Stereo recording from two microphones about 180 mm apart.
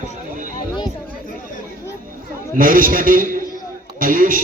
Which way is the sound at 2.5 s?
50° right (ahead or behind).